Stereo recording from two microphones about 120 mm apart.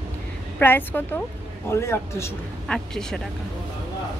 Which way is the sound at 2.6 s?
5° left (ahead or behind).